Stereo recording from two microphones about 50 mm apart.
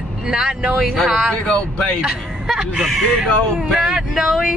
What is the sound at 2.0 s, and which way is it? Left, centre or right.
Speech, centre.